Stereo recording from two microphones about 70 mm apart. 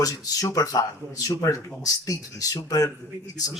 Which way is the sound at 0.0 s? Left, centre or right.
Left.